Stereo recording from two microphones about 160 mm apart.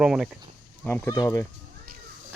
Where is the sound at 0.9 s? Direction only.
15° left (ahead or behind).